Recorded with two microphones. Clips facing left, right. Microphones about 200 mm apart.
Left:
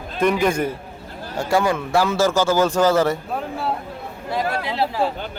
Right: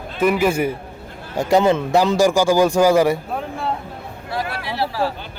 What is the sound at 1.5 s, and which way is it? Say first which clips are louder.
A man's voice: right 4 dB; 20° right (ahead or behind).